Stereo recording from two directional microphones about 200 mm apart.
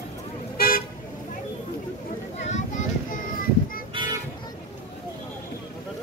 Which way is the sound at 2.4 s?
35° left (ahead or behind).